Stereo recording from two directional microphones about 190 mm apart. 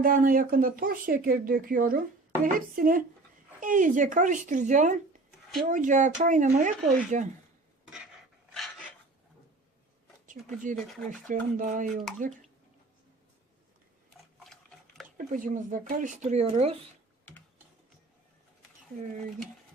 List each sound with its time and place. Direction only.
0.0 s speech: 45° right (ahead or behind)
10.2 s speech: 40° right (ahead or behind)
14.4 s a sound: centre (ahead or behind)
15.2 s speech: 45° right (ahead or behind)